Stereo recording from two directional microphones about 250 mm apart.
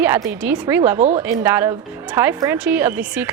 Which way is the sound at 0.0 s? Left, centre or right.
Centre.